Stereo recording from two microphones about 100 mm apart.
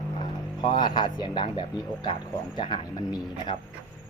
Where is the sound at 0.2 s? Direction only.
50° left (ahead or behind).